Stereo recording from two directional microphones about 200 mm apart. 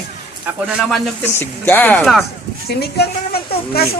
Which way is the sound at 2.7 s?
55° left (ahead or behind).